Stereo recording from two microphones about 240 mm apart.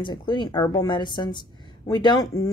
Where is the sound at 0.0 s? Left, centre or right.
Centre.